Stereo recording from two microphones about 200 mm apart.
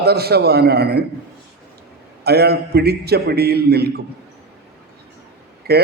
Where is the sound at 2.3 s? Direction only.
55° right (ahead or behind).